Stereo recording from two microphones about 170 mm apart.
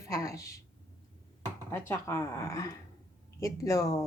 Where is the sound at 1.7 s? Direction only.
15° left (ahead or behind).